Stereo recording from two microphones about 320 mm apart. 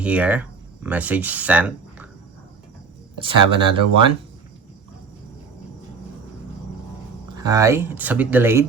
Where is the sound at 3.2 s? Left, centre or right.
Centre.